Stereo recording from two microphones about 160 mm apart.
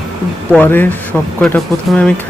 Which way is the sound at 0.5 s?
10° left (ahead or behind).